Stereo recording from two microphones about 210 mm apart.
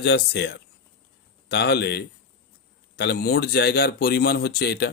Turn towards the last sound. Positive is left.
turn(degrees=50)  # may be behind; listen again after turning